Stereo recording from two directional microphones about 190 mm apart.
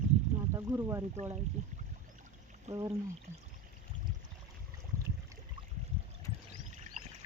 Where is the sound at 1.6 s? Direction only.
40° right (ahead or behind).